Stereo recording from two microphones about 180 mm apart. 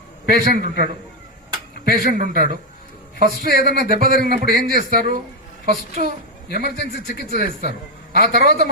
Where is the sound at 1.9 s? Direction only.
45° right (ahead or behind).